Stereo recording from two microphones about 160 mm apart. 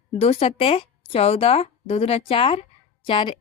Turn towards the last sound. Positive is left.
turn(degrees=30)  # may be behind; listen again after turning